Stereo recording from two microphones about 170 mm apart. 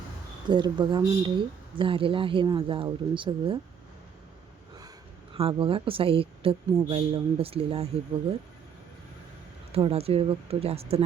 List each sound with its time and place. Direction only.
0.5 s speech: 25° right (ahead or behind)
5.3 s speech: 30° right (ahead or behind)
9.7 s speech: 35° right (ahead or behind)